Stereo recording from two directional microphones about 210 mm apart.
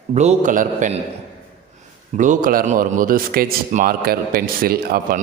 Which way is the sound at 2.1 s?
40° right (ahead or behind).